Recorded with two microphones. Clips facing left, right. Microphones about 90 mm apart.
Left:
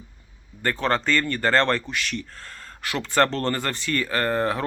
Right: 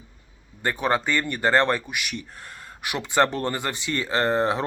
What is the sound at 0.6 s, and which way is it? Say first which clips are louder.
Speech: even; 15° right (ahead or behind).